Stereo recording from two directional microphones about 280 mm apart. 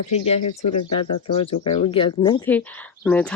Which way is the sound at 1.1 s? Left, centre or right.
Left.